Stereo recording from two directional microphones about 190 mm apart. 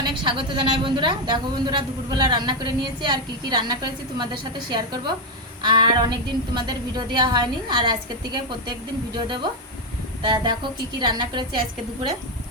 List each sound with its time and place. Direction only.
0.0 s speech: 25° right (ahead or behind)
9.1 s speech: 25° right (ahead or behind)